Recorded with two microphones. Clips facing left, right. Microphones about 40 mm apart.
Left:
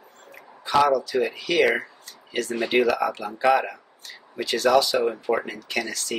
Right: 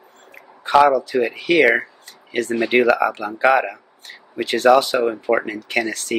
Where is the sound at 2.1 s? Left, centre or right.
Right.